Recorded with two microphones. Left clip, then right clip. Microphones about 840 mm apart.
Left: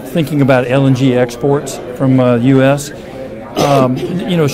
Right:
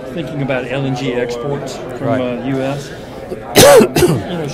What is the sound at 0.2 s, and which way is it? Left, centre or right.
Speech, left.